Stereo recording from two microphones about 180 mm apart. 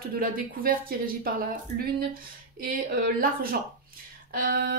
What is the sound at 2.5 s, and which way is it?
A woman's voice, 55° right (ahead or behind).